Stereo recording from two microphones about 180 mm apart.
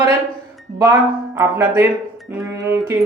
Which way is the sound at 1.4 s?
15° right (ahead or behind).